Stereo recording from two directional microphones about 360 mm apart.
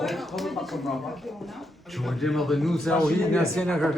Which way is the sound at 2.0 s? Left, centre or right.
Centre.